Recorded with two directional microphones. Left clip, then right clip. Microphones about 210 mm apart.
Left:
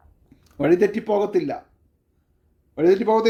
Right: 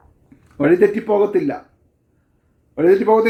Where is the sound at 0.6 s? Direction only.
45° left (ahead or behind).